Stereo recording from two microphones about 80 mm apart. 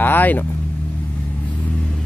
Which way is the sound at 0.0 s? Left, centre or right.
Left.